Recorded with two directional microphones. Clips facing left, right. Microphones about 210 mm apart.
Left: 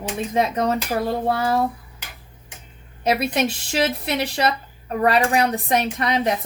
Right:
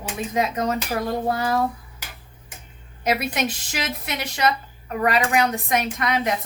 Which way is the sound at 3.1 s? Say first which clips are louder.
Left 3 dB; 30° left (ahead or behind).